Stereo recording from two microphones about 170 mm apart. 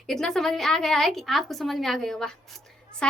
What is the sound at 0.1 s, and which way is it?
A woman's voice, centre (ahead or behind).